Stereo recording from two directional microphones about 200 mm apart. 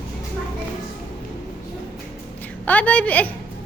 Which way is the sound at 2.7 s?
5° left (ahead or behind).